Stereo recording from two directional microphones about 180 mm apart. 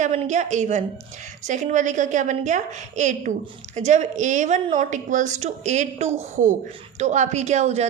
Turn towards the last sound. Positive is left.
turn(degrees=-40)  # may be behind; listen again after turning